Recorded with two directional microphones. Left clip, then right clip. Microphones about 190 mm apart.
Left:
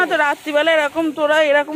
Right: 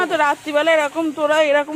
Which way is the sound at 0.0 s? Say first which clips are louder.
Left 1 dB; 5° right (ahead or behind).